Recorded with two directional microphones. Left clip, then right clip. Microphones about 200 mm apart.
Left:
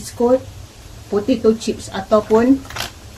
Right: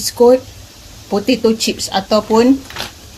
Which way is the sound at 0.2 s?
45° right (ahead or behind).